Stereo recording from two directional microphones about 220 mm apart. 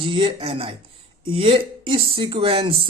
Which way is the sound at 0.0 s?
25° right (ahead or behind).